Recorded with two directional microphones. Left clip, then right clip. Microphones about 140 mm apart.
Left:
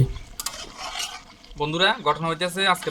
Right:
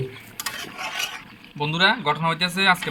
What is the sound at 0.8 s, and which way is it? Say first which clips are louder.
Mechanisms: right 3 dB; 10° right (ahead or behind).